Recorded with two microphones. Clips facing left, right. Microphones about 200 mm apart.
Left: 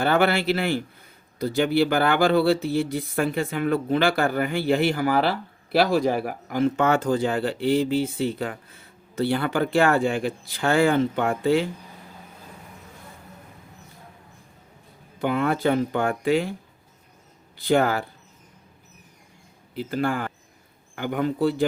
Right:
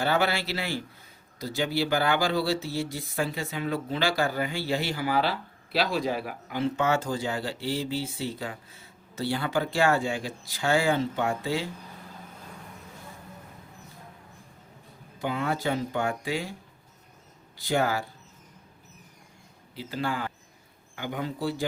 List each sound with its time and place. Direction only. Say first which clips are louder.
0.0 s speech: left 5 dB; 55° left (ahead or behind)
15.2 s speech: left 6 dB; 60° left (ahead or behind)
17.6 s speech: left 6 dB; 60° left (ahead or behind)
19.9 s speech: left 5 dB; 50° left (ahead or behind)